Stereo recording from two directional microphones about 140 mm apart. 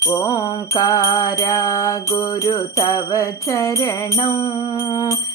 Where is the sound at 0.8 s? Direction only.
25° left (ahead or behind).